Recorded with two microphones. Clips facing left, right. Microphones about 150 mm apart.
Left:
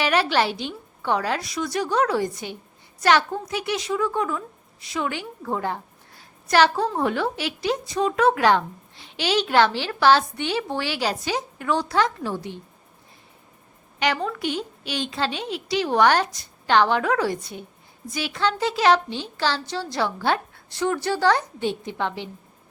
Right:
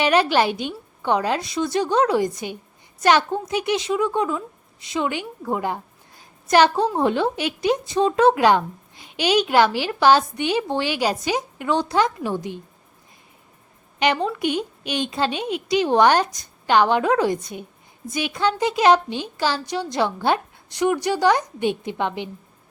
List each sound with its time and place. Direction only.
0.0 s a woman's voice: 20° right (ahead or behind)
14.0 s a woman's voice: 20° right (ahead or behind)